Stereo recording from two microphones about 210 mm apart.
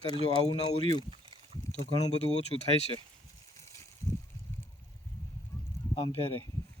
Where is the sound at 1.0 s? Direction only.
25° right (ahead or behind).